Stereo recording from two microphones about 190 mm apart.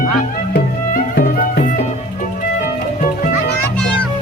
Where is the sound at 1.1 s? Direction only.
45° left (ahead or behind).